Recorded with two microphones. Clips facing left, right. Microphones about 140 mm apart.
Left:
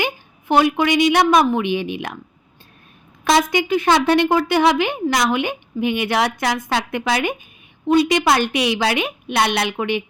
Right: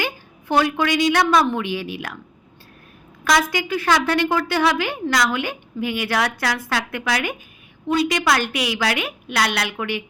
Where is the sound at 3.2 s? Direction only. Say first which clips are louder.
Left 3 dB; 25° left (ahead or behind).